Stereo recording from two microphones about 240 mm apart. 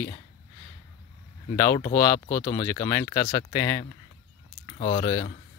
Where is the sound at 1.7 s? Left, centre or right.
Left.